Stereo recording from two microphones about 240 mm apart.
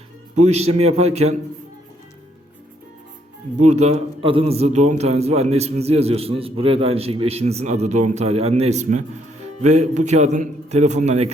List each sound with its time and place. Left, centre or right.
0.3 s a man's voice: right
3.6 s a man's voice: right